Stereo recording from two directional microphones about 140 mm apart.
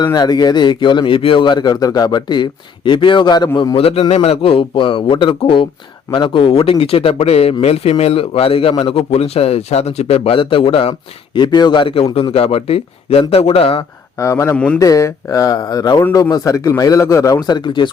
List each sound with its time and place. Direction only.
0.0 s a man's voice: 30° left (ahead or behind)
14.2 s speech: 20° left (ahead or behind)
14.5 s speech: 10° left (ahead or behind)
14.8 s speech: 25° left (ahead or behind)